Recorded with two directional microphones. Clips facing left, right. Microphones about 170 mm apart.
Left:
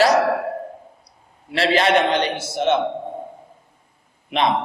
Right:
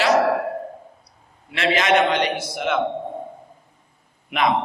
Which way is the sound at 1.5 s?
35° left (ahead or behind).